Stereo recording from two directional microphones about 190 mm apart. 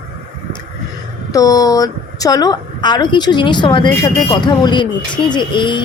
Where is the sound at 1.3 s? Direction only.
20° left (ahead or behind).